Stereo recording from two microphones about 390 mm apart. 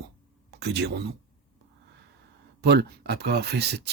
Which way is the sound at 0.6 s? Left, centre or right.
Right.